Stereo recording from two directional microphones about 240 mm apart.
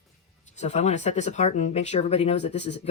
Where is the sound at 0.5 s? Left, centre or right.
Left.